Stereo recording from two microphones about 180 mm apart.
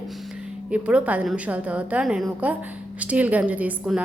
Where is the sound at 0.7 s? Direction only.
5° right (ahead or behind).